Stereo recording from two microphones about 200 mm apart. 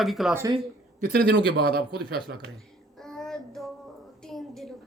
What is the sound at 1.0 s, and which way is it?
A man's voice, 45° right (ahead or behind).